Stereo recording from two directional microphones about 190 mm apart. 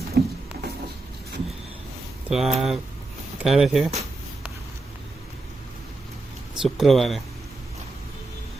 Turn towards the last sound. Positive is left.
turn(degrees=0)  # may be behind; listen again after turning